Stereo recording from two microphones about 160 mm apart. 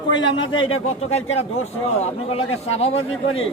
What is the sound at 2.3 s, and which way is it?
Speech, 40° left (ahead or behind).